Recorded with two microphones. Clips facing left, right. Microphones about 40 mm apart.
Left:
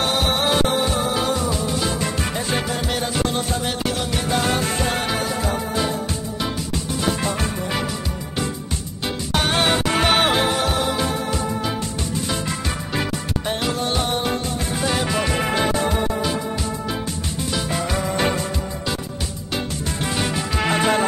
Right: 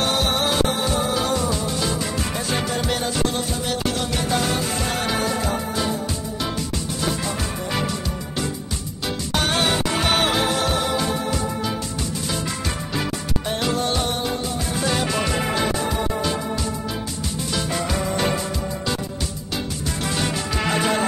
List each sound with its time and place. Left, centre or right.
0.3 s music: left
4.4 s music: left
9.0 s music: centre
9.9 s music: left
10.3 s music: centre
12.3 s music: centre
13.6 s music: centre
15.3 s music: left
17.5 s music: centre
19.9 s music: centre